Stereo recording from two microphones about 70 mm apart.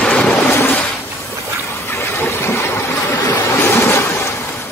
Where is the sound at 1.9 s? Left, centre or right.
Left.